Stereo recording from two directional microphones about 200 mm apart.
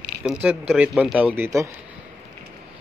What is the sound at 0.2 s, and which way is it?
A man's voice, 5° right (ahead or behind).